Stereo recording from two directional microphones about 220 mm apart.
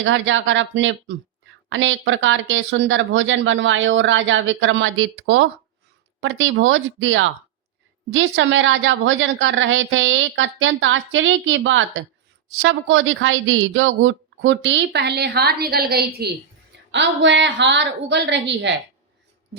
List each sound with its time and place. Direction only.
0.0 s a woman's voice: 60° right (ahead or behind)